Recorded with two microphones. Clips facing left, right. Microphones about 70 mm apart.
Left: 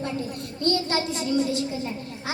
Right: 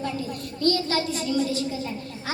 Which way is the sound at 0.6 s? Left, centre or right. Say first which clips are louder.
Right 1 dB; left.